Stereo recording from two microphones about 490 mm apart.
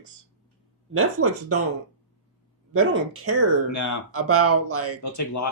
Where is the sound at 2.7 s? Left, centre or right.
Right.